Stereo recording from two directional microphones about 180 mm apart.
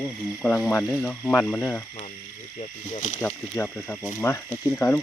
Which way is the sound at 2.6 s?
40° left (ahead or behind).